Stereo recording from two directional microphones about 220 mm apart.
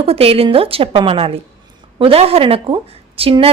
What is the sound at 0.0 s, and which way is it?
Speech, 25° right (ahead or behind).